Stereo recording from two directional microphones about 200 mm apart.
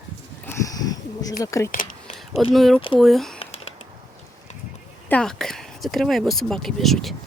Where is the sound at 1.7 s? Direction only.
40° left (ahead or behind).